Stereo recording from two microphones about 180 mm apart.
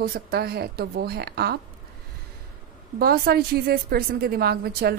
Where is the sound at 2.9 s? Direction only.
60° right (ahead or behind).